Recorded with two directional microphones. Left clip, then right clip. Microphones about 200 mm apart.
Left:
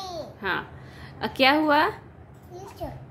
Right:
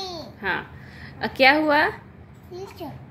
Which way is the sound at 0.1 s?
15° left (ahead or behind).